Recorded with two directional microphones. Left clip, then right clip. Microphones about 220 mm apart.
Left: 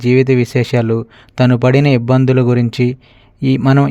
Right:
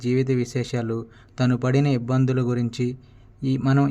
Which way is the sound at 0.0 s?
40° left (ahead or behind).